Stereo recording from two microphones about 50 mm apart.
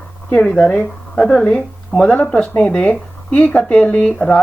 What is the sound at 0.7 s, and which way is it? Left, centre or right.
Speech, left.